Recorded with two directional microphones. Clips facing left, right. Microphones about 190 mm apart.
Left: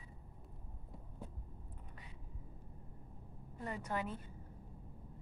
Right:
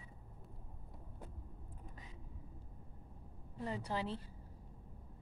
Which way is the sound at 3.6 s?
30° right (ahead or behind).